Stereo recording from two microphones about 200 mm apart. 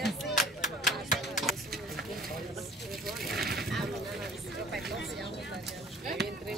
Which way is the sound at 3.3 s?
50° right (ahead or behind).